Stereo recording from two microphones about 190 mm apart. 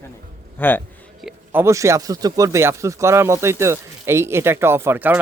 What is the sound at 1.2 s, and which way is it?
Speech, 10° right (ahead or behind).